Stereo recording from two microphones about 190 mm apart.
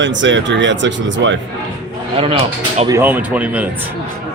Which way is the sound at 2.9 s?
10° right (ahead or behind).